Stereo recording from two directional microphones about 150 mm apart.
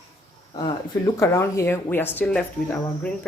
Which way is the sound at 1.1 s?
20° left (ahead or behind).